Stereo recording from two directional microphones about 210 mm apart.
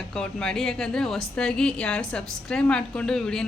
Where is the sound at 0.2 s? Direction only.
5° left (ahead or behind).